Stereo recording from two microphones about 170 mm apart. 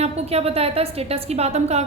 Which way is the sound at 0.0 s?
35° right (ahead or behind).